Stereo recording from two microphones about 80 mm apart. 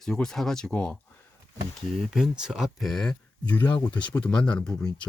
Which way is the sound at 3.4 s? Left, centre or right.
Left.